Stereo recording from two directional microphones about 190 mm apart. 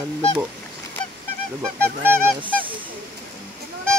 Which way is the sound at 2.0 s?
10° right (ahead or behind).